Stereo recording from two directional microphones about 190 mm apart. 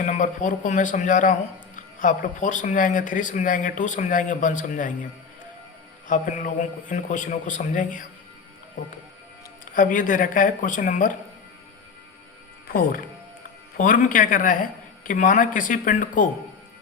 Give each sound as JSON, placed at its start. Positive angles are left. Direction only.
{"t": 0.0, "sound": "speech", "side_deg": 40}
{"t": 6.1, "sound": "speech", "side_deg": 45}
{"t": 9.7, "sound": "speech", "side_deg": 45}
{"t": 13.7, "sound": "speech", "side_deg": 45}